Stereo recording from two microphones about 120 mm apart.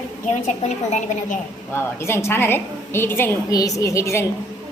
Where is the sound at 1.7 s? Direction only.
20° left (ahead or behind).